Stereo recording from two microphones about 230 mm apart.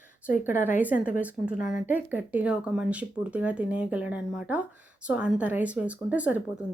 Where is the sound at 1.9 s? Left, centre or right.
Centre.